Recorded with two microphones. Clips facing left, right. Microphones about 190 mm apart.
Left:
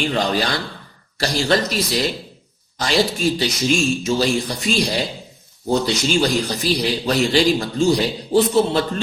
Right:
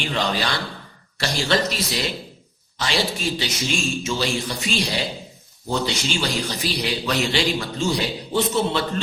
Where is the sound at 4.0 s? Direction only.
40° left (ahead or behind).